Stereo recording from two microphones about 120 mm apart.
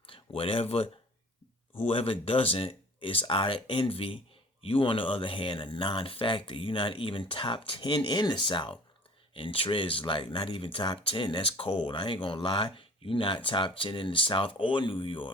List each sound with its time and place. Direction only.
0.1 s speech: 50° left (ahead or behind)